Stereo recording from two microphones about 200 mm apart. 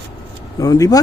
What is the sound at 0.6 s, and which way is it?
Speech, 20° left (ahead or behind).